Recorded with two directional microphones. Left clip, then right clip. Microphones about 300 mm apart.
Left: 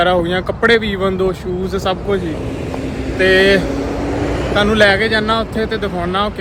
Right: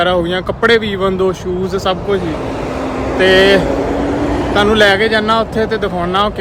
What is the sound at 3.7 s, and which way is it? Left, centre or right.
Vehicle, right.